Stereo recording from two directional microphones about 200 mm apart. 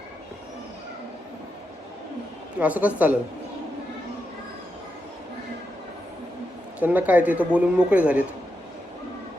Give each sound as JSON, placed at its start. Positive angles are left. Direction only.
{"t": 2.6, "sound": "a man's voice", "side_deg": -5}
{"t": 6.7, "sound": "a man's voice", "side_deg": -10}